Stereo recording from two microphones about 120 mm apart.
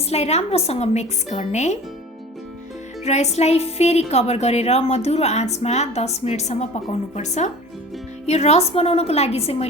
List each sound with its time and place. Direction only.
0.0 s a woman's voice: 60° left (ahead or behind)
3.0 s a woman's voice: 70° left (ahead or behind)